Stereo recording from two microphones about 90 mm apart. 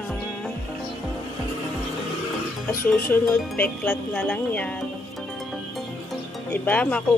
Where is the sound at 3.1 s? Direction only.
20° left (ahead or behind).